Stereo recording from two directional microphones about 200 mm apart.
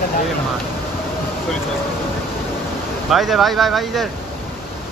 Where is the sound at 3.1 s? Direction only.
Centre (ahead or behind).